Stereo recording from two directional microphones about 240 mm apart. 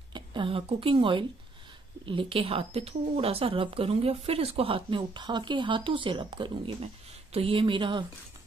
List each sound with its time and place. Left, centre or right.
0.1 s a woman's voice: centre